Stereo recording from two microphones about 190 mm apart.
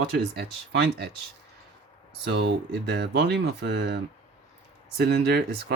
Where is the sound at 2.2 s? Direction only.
65° right (ahead or behind).